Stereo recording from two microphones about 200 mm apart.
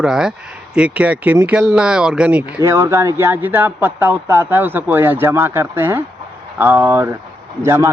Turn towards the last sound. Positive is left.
turn(degrees=-15)  # may be behind; listen again after turning